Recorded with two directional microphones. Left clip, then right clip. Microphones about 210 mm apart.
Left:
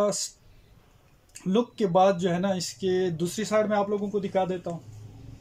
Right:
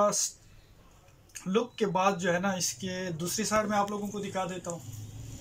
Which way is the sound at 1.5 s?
25° left (ahead or behind).